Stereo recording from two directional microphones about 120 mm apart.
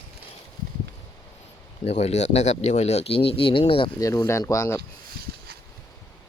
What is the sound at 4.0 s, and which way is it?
Speech, 30° left (ahead or behind).